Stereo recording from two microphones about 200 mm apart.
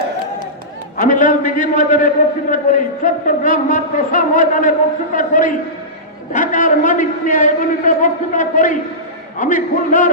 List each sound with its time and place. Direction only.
0.9 s a man's voice: 40° left (ahead or behind)